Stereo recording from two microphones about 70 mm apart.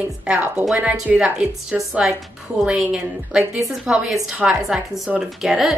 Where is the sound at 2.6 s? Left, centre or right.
Centre.